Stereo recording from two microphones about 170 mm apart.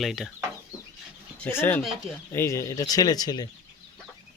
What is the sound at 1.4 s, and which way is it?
Speech, 10° left (ahead or behind).